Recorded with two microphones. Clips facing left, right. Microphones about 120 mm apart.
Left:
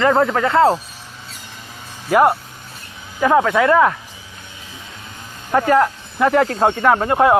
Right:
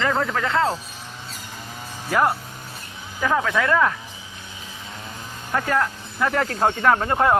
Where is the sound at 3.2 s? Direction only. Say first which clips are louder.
Left 7 dB; 15° left (ahead or behind).